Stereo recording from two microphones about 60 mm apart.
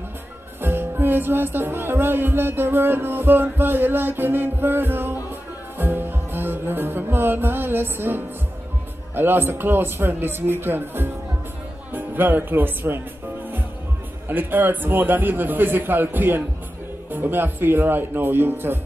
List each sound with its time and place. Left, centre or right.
0.6 s music: right
9.1 s a man's voice: right
14.2 s a man's voice: right